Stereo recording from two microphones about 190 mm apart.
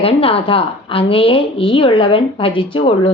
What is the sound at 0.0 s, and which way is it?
A woman's voice, 30° left (ahead or behind).